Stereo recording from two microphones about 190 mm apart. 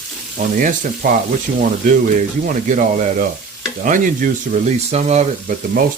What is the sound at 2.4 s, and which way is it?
Speech, 45° right (ahead or behind).